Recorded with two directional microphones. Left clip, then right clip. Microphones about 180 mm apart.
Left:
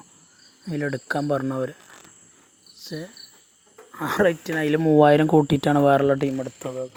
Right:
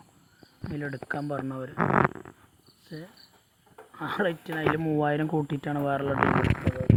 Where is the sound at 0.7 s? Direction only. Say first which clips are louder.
Left 7 dB; 45° left (ahead or behind).